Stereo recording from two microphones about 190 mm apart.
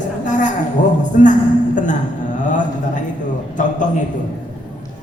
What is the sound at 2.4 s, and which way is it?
A woman's voice, 40° left (ahead or behind).